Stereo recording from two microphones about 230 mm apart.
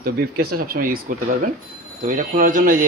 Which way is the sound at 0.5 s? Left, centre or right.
Right.